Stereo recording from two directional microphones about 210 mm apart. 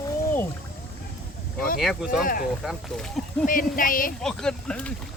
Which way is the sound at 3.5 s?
40° left (ahead or behind).